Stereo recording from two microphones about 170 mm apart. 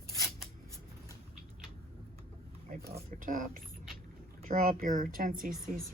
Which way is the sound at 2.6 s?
60° right (ahead or behind).